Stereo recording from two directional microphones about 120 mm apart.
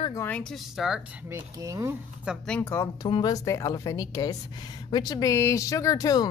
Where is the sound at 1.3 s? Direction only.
25° right (ahead or behind).